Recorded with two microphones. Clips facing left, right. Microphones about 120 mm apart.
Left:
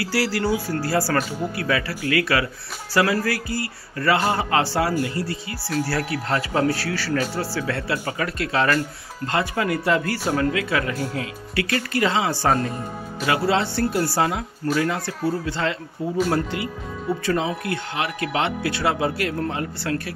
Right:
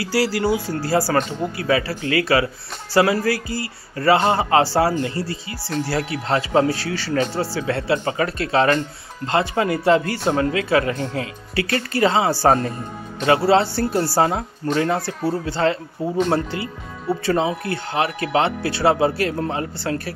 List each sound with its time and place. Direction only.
0.0 s speech: 20° right (ahead or behind)
14.6 s speech: 20° right (ahead or behind)
15.0 s speech: 5° right (ahead or behind)
15.4 s speech: 35° right (ahead or behind)
17.3 s speech: 30° right (ahead or behind)